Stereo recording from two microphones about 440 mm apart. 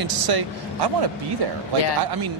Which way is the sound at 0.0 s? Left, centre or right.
Right.